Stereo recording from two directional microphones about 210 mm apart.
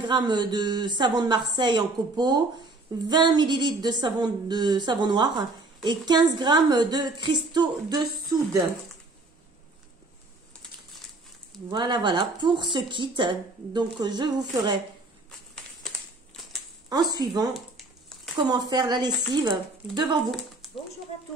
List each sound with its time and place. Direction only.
0.0 s speech: 20° right (ahead or behind)
11.7 s speech: 20° right (ahead or behind)
16.9 s speech: 20° right (ahead or behind)
18.5 s speech: 20° right (ahead or behind)
20.6 s a sound: centre (ahead or behind)